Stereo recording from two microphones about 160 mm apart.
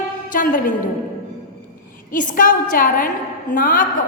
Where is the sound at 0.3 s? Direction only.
60° left (ahead or behind).